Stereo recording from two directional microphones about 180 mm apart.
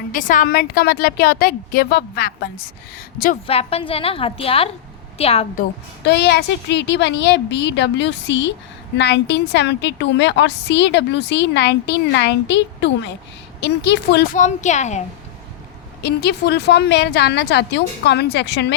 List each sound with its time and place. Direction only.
0.1 s a woman's voice: 50° left (ahead or behind)
3.4 s a woman's voice: 35° left (ahead or behind)
6.0 s a woman's voice: 70° left (ahead or behind)
14.3 s a woman's voice: 40° left (ahead or behind)
16.0 s a woman's voice: 65° left (ahead or behind); by 18.8 s 80° left